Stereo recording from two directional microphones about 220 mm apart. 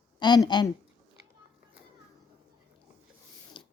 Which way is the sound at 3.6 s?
20° left (ahead or behind).